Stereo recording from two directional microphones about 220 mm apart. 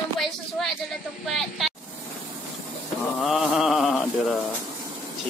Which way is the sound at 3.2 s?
Centre (ahead or behind).